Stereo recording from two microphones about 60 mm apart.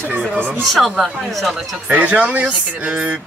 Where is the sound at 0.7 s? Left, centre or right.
Centre.